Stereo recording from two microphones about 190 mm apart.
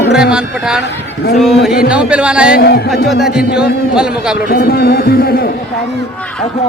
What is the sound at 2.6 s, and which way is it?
Speech, 55° left (ahead or behind).